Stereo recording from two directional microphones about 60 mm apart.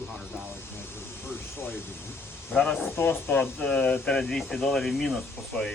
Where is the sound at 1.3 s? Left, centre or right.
Left.